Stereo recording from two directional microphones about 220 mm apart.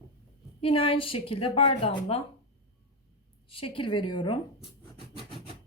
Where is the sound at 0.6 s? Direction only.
25° left (ahead or behind).